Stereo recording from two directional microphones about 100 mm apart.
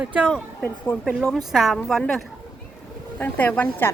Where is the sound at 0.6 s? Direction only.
15° left (ahead or behind).